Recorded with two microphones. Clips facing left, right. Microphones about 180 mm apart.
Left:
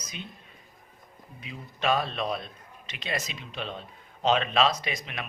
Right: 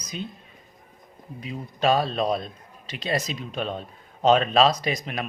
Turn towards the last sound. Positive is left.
turn(degrees=-40)  # may be behind; listen again after turning